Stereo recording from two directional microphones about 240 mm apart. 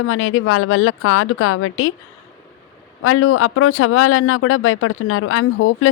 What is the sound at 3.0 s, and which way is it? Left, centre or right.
Speech, left.